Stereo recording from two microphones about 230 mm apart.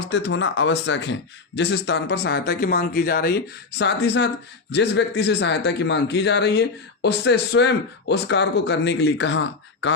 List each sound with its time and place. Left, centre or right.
0.0 s a man's voice: left